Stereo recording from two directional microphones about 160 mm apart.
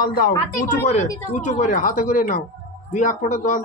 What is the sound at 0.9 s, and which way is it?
Speech, 55° left (ahead or behind).